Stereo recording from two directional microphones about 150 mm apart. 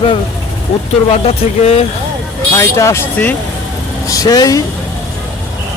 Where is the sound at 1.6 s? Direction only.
45° left (ahead or behind).